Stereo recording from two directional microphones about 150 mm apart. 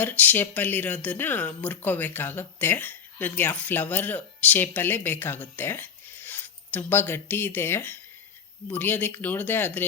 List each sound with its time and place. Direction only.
0.0 s speech: 10° left (ahead or behind)